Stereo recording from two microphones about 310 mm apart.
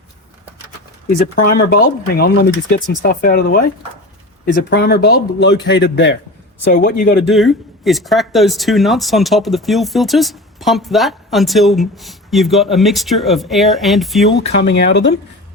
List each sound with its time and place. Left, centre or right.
1.5 s a man's voice: left
6.7 s speech: left
7.3 s speech: centre
14.6 s a man's voice: left